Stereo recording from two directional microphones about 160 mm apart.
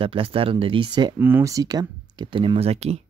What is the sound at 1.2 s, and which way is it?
Speech, 15° right (ahead or behind).